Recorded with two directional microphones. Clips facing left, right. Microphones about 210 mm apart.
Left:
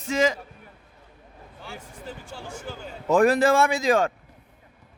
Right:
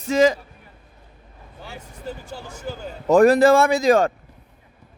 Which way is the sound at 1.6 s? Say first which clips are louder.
Right 3 dB; 40° right (ahead or behind).